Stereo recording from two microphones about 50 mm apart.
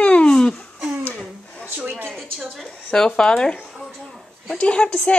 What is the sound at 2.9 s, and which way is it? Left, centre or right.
Speech, centre.